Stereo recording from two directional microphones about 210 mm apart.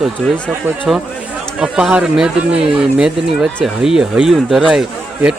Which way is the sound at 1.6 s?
5° right (ahead or behind).